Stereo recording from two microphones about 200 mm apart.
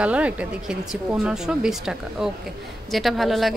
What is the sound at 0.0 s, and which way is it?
Speech, 5° right (ahead or behind).